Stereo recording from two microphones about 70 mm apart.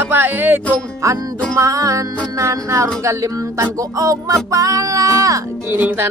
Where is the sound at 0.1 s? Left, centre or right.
Right.